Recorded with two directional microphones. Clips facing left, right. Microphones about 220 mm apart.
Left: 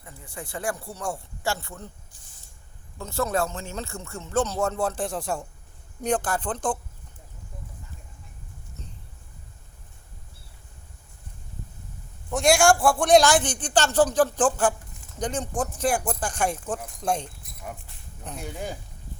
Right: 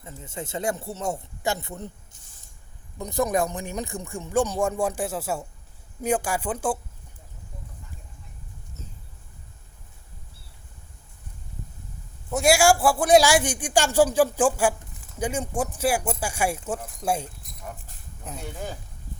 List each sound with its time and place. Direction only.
0.0 s speech: 20° right (ahead or behind)
3.0 s speech: 15° right (ahead or behind)
12.3 s a man's voice: 5° right (ahead or behind)